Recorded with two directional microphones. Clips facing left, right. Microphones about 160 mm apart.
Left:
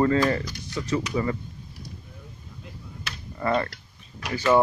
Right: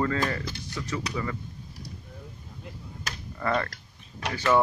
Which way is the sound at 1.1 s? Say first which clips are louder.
Left 6 dB; 30° left (ahead or behind).